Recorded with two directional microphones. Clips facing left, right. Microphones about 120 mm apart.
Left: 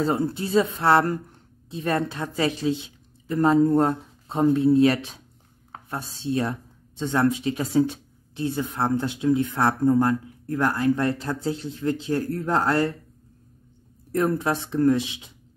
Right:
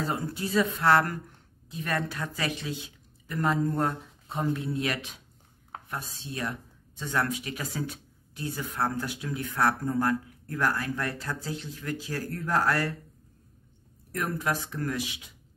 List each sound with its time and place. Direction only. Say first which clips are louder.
0.0 s speech: left 7 dB; 30° left (ahead or behind)
14.1 s speech: left 7 dB; 30° left (ahead or behind)